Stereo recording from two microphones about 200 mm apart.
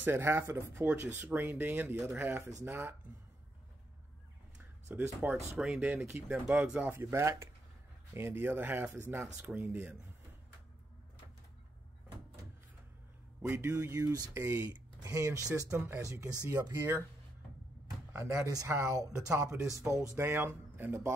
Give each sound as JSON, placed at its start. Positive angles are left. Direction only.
{"t": 0.0, "sound": "speech", "side_deg": -10}
{"t": 4.8, "sound": "speech", "side_deg": -10}
{"t": 13.4, "sound": "speech", "side_deg": -10}
{"t": 18.1, "sound": "speech", "side_deg": -15}